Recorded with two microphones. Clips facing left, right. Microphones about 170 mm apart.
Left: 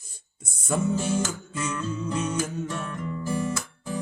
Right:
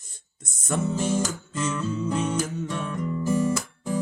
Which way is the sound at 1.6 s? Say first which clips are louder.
Right 3 dB; 5° right (ahead or behind).